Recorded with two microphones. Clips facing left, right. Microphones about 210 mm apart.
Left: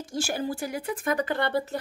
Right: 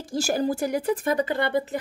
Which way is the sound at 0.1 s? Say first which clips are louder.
Right 6 dB; 40° right (ahead or behind).